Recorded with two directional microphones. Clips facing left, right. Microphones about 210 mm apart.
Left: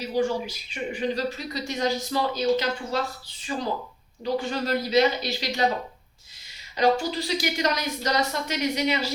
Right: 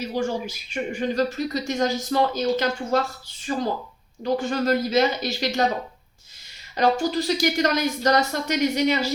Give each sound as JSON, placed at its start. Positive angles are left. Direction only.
{"t": 0.0, "sound": "speech", "side_deg": -45}
{"t": 6.7, "sound": "speech", "side_deg": -45}